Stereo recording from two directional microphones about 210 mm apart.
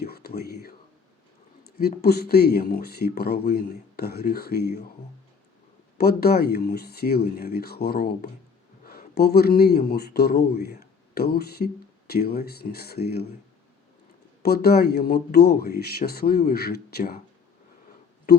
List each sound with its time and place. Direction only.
0.0 s a sound: 50° left (ahead or behind)
1.8 s speech: 50° left (ahead or behind)
6.0 s speech: 50° left (ahead or behind)
14.4 s speech: 50° left (ahead or behind)